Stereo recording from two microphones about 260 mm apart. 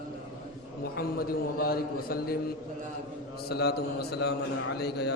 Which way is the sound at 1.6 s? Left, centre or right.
Left.